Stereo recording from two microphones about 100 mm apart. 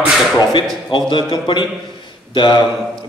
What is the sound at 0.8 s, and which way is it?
A man's voice, 50° left (ahead or behind).